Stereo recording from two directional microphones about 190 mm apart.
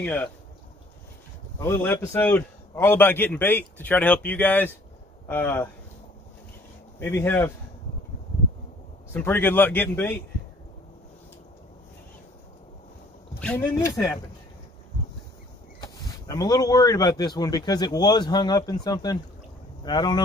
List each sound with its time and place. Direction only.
0.0 s a man's voice: 10° left (ahead or behind)
1.6 s a man's voice: 10° left (ahead or behind)
7.0 s a man's voice: 15° left (ahead or behind)
9.1 s a man's voice: 10° left (ahead or behind)
13.4 s a man's voice: 10° left (ahead or behind)
15.8 s speech: 20° left (ahead or behind)